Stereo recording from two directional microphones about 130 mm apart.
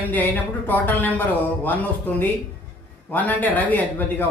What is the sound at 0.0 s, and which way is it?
Speech, 15° left (ahead or behind).